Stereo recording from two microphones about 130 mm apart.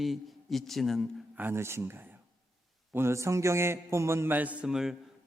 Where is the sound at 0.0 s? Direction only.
Centre (ahead or behind).